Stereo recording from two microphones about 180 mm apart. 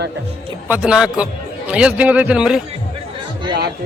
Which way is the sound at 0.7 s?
5° right (ahead or behind).